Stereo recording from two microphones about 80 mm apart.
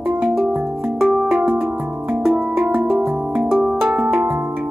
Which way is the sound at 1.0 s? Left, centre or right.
Centre.